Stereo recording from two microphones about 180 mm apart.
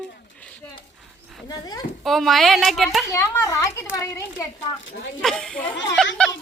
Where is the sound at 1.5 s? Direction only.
20° left (ahead or behind).